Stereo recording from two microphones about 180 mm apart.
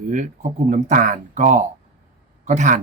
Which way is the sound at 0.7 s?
45° right (ahead or behind).